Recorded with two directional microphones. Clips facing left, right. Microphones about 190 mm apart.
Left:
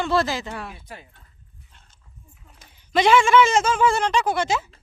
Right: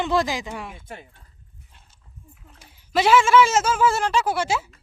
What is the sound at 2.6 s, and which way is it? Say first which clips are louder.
A woman's voice: left 1 dB; 5° right (ahead or behind).